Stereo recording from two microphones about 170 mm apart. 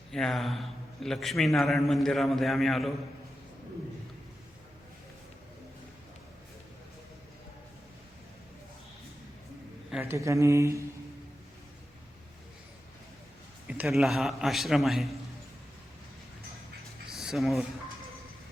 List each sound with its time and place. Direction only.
0.1 s a man's voice: centre (ahead or behind)
9.9 s speech: 15° right (ahead or behind)
13.7 s a man's voice: centre (ahead or behind)
17.1 s a sound: centre (ahead or behind)